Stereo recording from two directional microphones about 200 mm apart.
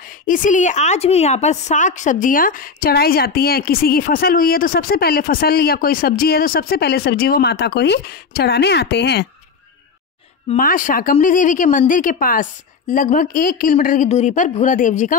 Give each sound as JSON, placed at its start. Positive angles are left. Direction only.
{"t": 0.3, "sound": "a woman's voice", "side_deg": 40}
{"t": 10.5, "sound": "a woman's voice", "side_deg": 40}